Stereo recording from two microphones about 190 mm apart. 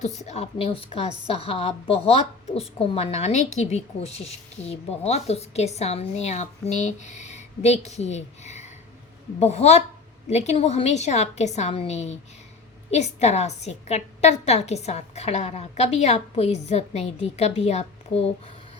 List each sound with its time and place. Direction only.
0.0 s a woman's voice: 35° left (ahead or behind)